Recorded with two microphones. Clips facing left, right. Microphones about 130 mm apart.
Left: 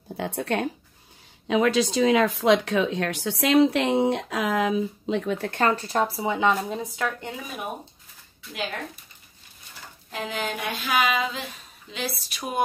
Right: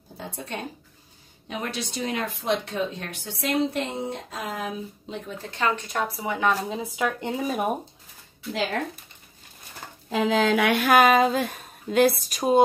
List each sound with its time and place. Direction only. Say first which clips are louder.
0.2 s speech: left 8 dB; 75° left (ahead or behind)
1.5 s speech: left 11 dB; 90° left
5.5 s speech: left 1 dB; 40° left (ahead or behind); by 6.5 s 25° left (ahead or behind)
6.5 s speech: left 1 dB; centre (ahead or behind)
7.0 s speech: right 6 dB; 20° right (ahead or behind)
7.3 s speech: right 8 dB; 45° right (ahead or behind)
10.0 s speech: right 9 dB; 90° right; by 12.4 s 45° right (ahead or behind)